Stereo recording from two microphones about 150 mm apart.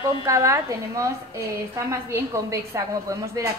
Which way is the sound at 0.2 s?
20° right (ahead or behind).